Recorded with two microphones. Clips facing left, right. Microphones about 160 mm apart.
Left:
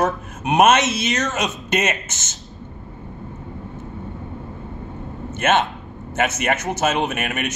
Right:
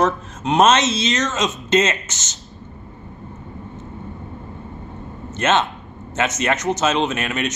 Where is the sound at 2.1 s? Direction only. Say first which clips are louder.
Even; 55° left (ahead or behind).